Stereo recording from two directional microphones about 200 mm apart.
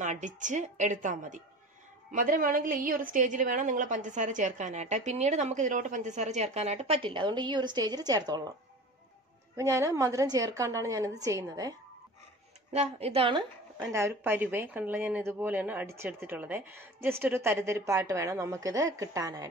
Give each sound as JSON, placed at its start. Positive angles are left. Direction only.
{"t": 0.0, "sound": "a woman's voice", "side_deg": -40}
{"t": 9.6, "sound": "speech", "side_deg": -15}
{"t": 12.7, "sound": "a woman's voice", "side_deg": -30}
{"t": 13.9, "sound": "speech", "side_deg": -15}